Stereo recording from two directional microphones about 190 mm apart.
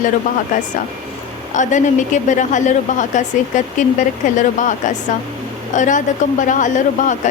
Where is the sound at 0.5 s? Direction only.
45° left (ahead or behind).